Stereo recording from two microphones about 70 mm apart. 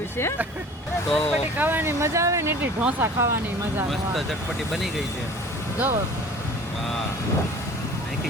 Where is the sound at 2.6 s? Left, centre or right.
Centre.